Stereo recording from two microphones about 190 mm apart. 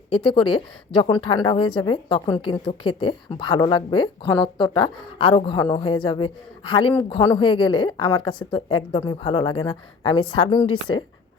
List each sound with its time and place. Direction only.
0.3 s a woman's voice: 25° left (ahead or behind)